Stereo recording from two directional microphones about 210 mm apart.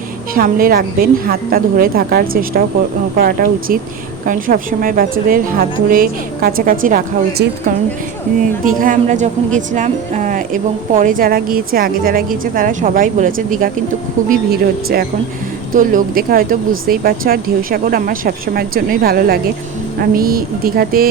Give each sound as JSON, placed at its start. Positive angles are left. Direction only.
{"t": 0.3, "sound": "speech", "side_deg": -45}
{"t": 8.8, "sound": "a woman's voice", "side_deg": -40}